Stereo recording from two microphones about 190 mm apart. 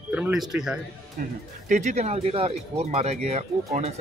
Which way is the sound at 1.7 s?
40° right (ahead or behind).